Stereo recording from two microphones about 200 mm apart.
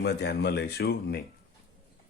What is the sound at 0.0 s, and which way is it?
Speech, 55° left (ahead or behind).